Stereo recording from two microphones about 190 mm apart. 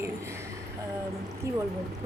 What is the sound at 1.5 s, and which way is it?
Speech, 15° right (ahead or behind).